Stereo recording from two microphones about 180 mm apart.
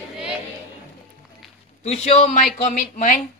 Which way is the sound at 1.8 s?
35° left (ahead or behind).